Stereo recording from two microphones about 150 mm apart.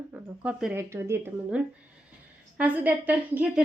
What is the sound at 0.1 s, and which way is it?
A woman's voice, 10° right (ahead or behind).